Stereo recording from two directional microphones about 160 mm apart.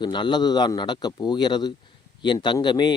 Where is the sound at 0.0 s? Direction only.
30° left (ahead or behind).